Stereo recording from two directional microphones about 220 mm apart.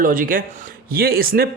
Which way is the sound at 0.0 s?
40° right (ahead or behind).